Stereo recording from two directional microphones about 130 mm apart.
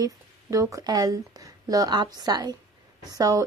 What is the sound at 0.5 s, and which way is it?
Speech, 25° right (ahead or behind).